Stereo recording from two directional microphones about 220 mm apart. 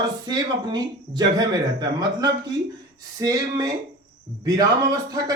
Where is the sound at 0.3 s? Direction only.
20° right (ahead or behind).